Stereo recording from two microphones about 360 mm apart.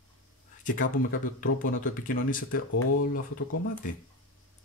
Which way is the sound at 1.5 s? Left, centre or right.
Left.